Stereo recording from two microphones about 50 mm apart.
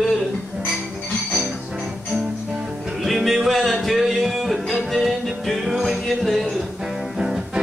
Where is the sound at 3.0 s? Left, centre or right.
Centre.